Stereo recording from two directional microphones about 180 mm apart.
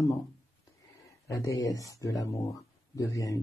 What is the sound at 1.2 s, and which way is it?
Speech, 20° left (ahead or behind).